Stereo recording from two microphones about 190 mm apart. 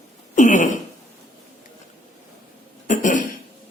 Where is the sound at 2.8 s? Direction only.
40° left (ahead or behind).